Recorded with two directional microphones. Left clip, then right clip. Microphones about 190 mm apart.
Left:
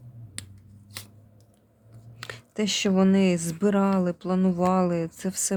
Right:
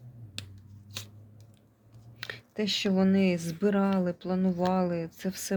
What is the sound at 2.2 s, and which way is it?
Speech, 25° left (ahead or behind).